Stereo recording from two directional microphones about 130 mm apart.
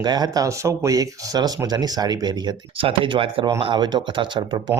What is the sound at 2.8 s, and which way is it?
Speech, 45° right (ahead or behind).